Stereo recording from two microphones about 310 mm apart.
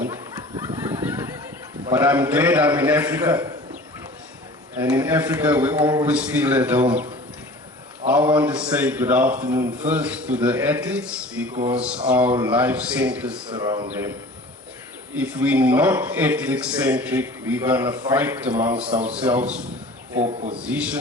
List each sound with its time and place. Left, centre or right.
0.0 s a sound: centre
1.9 s a man's voice: centre
4.8 s a man's voice: centre
13.5 s speech: centre
15.1 s a man's voice: centre
20.2 s speech: right
20.6 s a man's voice: centre